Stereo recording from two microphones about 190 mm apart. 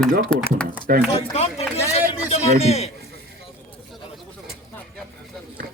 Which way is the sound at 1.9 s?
35° left (ahead or behind).